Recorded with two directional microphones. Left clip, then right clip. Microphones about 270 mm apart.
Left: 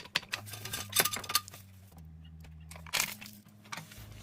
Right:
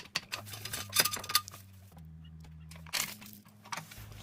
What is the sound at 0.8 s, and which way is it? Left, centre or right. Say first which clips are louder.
Chink: even; centre.